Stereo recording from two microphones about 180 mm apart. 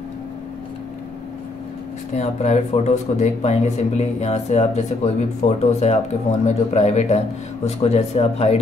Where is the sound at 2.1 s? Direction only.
40° left (ahead or behind).